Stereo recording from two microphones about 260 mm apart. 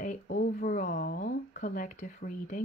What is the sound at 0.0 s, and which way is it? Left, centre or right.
Speech, left.